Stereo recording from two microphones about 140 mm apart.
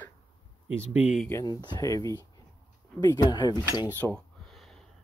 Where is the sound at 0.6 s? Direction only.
15° right (ahead or behind).